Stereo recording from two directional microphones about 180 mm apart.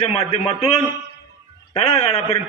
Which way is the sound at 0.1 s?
35° left (ahead or behind).